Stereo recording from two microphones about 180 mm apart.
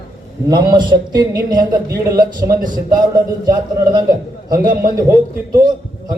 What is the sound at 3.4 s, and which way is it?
A man's voice, 20° right (ahead or behind).